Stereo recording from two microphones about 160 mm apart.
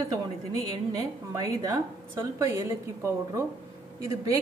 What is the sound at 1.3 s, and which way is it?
A woman's voice, 25° right (ahead or behind).